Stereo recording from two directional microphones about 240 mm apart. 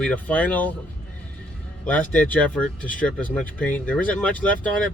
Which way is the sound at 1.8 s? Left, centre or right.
Centre.